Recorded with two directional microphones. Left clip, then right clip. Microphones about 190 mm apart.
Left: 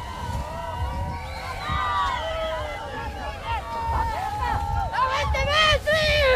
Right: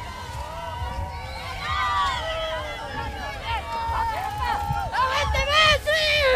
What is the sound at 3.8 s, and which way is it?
Music, 35° right (ahead or behind).